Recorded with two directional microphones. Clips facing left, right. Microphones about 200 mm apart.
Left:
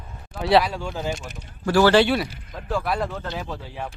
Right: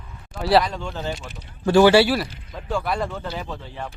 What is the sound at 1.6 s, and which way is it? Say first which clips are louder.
Speech: right 3 dB; 20° right (ahead or behind).